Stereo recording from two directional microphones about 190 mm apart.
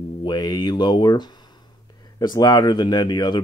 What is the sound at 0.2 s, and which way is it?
Speech, 20° left (ahead or behind).